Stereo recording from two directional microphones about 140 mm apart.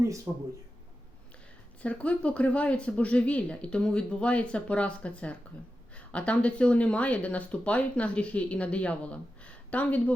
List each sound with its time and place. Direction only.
0.3 s speech: 25° right (ahead or behind)
1.8 s speech: 10° left (ahead or behind)